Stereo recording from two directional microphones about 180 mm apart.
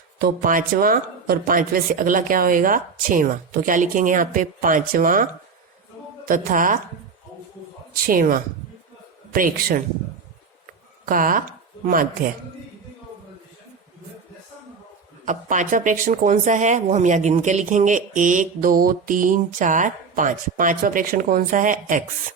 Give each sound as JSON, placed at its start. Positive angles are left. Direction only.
{"t": 0.2, "sound": "a woman's voice", "side_deg": -50}
{"t": 8.0, "sound": "a woman's voice", "side_deg": -55}
{"t": 11.0, "sound": "a woman's voice", "side_deg": -50}
{"t": 15.2, "sound": "a woman's voice", "side_deg": -45}